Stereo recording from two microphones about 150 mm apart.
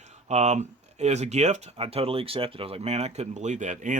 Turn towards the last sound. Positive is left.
turn(degrees=-55)  # may be behind; listen again after turning